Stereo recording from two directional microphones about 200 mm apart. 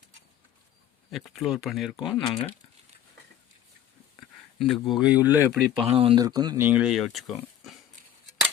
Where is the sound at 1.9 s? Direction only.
20° left (ahead or behind).